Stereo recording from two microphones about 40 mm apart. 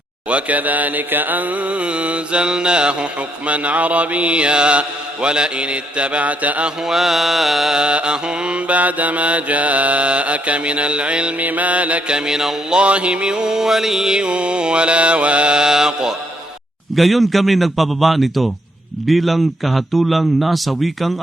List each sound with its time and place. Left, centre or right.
0.3 s mantra: right
6.8 s a man's voice: centre
7.7 s mantra: right
11.3 s mantra: right
12.1 s mantra: centre
12.7 s mantra: right; by 14.1 s centre
14.1 s mantra: right
16.9 s a man's voice: centre